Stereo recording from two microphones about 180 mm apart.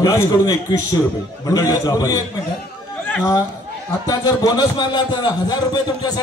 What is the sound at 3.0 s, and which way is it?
Chatter, 10° left (ahead or behind).